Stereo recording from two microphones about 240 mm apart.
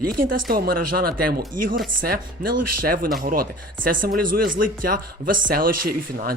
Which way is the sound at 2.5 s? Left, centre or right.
Right.